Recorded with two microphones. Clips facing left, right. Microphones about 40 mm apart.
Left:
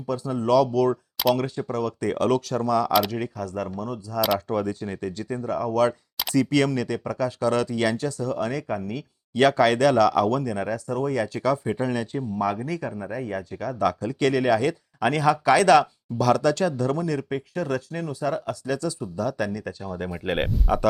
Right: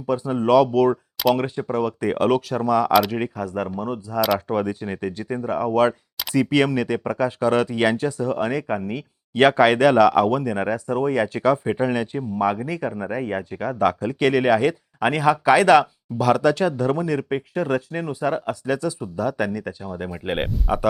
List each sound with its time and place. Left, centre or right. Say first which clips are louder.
0.1 s speech: right 4 dB; right
19.8 s speech: right 1 dB; centre